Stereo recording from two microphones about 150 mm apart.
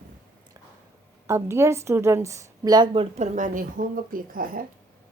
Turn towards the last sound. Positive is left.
turn(degrees=-70)  # may be behind; listen again after turning